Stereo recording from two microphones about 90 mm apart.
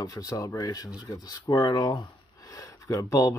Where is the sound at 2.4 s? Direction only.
40° left (ahead or behind).